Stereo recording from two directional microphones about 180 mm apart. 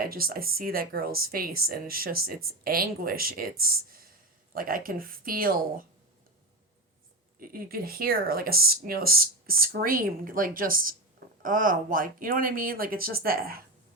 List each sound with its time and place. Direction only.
0.0 s speech: 55° right (ahead or behind)
7.3 s speech: 55° right (ahead or behind)